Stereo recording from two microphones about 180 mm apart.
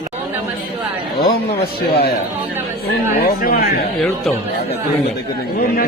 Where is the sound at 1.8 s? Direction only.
60° left (ahead or behind).